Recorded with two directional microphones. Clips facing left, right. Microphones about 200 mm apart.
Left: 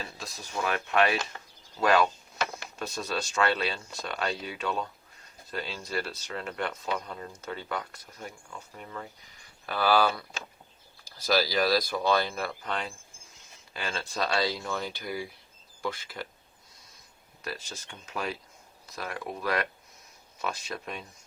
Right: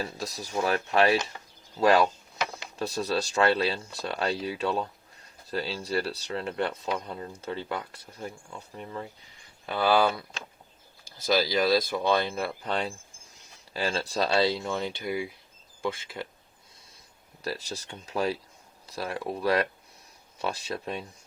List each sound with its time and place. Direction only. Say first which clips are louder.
0.0 s speech: right 7 dB; 40° right (ahead or behind)
17.4 s speech: right 5 dB; 35° right (ahead or behind)